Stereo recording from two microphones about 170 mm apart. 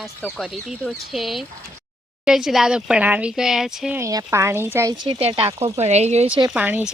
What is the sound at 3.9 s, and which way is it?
Speech, 15° right (ahead or behind).